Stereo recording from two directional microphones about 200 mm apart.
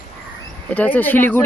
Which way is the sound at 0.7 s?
10° left (ahead or behind).